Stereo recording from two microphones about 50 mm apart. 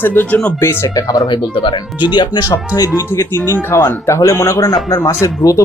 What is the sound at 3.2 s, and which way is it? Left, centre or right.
Speech, left.